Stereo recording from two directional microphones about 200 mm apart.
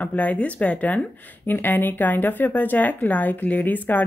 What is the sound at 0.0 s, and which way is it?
Speech, 10° left (ahead or behind).